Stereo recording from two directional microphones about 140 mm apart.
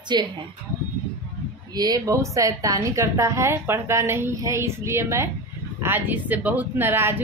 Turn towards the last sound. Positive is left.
turn(degrees=-15)  # may be behind; listen again after turning